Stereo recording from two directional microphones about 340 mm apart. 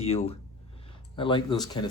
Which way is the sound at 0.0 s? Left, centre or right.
Centre.